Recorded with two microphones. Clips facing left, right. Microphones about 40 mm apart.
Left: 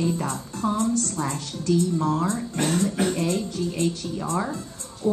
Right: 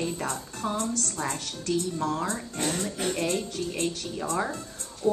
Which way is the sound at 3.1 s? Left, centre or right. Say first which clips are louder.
Left 3 dB; right.